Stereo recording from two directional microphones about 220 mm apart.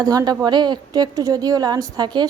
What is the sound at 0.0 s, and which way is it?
A woman's voice, 15° right (ahead or behind).